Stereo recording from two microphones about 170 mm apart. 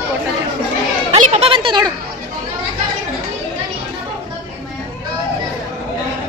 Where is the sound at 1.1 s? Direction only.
40° right (ahead or behind).